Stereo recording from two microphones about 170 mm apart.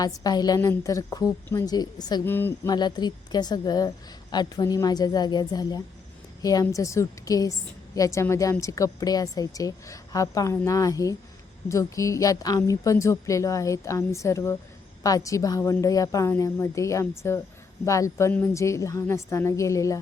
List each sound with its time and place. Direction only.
0.0 s a woman's voice: 20° left (ahead or behind)
2.2 s a woman's voice: 15° left (ahead or behind)
2.7 s a woman's voice: 25° left (ahead or behind)